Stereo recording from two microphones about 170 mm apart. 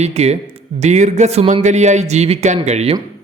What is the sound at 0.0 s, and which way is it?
A man's voice, 40° right (ahead or behind).